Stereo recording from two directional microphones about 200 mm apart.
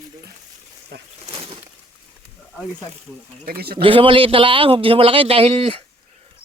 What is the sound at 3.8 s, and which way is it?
A man's voice, 25° right (ahead or behind).